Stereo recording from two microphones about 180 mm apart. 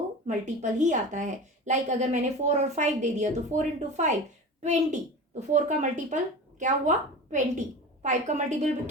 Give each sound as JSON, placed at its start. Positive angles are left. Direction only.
{"t": 0.3, "sound": "a woman's voice", "side_deg": -45}